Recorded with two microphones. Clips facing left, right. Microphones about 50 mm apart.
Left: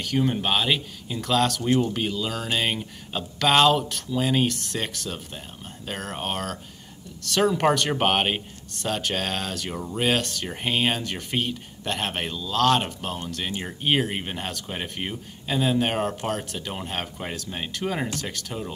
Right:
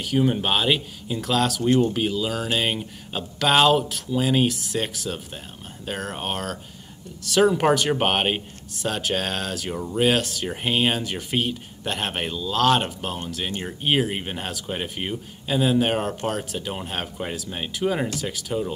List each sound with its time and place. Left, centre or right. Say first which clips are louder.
0.0 s speech: right 2 dB; centre